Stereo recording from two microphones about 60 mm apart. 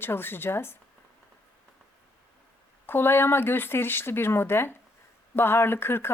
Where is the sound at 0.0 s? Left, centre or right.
Left.